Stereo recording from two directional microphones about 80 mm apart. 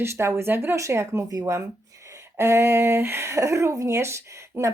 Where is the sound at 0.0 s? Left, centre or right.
Right.